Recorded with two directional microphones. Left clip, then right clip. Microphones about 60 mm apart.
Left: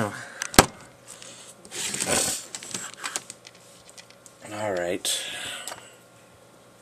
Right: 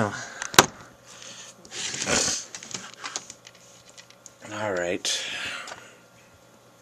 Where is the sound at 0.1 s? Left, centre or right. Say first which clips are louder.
Right 2 dB; right.